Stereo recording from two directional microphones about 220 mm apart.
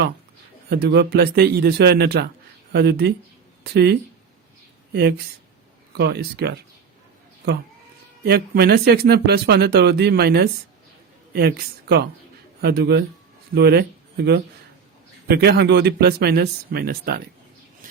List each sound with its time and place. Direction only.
0.7 s speech: 50° right (ahead or behind)
8.2 s speech: 45° right (ahead or behind)